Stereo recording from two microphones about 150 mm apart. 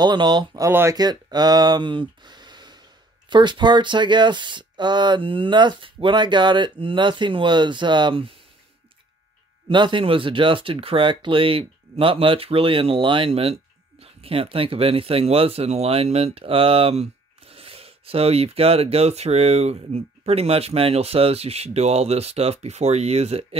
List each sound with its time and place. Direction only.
0.0 s speech: 30° right (ahead or behind)
0.7 s speech: 15° right (ahead or behind)
0.9 s speech: 25° right (ahead or behind)
9.7 s speech: 35° right (ahead or behind)